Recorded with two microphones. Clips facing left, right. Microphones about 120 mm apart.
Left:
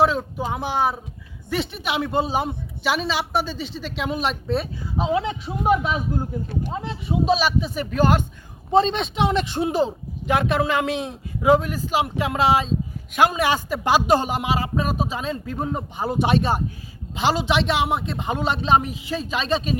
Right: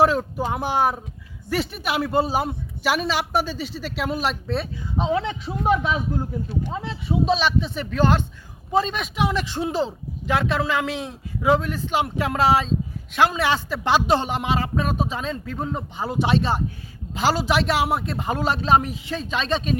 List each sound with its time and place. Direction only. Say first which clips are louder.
0.0 s speech: right 1 dB; 10° right (ahead or behind)
7.3 s a man's voice: left 3 dB; 10° left (ahead or behind)
8.7 s a man's voice: left 4 dB; 25° left (ahead or behind); by 12.7 s centre (ahead or behind)
13.1 s a man's voice: left 1 dB; 15° left (ahead or behind)
17.2 s speech: even; centre (ahead or behind)